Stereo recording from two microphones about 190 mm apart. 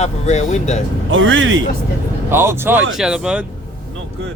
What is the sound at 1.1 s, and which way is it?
Speech, 80° right.